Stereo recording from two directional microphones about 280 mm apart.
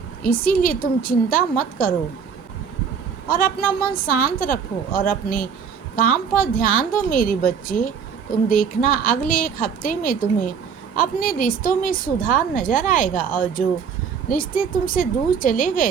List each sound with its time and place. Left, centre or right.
0.2 s a woman's voice: left
3.2 s a woman's voice: left